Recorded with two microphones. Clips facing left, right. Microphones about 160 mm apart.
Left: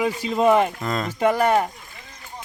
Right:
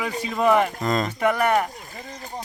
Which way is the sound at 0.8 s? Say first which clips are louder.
Right 3 dB; centre (ahead or behind).